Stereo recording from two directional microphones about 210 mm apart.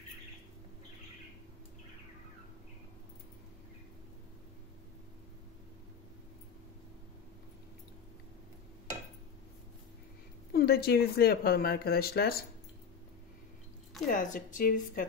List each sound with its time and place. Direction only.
10.5 s speech: 50° left (ahead or behind)
14.0 s a woman's voice: 40° left (ahead or behind)